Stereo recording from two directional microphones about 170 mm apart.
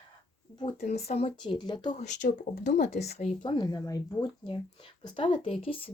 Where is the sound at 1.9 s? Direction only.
45° left (ahead or behind).